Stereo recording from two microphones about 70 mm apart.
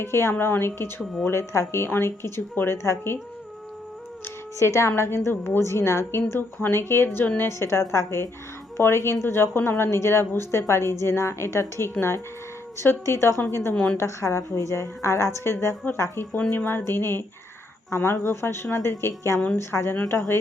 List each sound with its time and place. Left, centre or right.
0.0 s a woman's voice: left
4.6 s a woman's voice: left